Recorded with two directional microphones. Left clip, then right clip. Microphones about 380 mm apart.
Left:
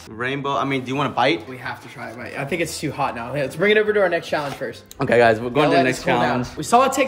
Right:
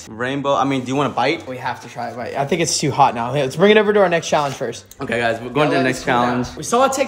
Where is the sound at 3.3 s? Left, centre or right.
Right.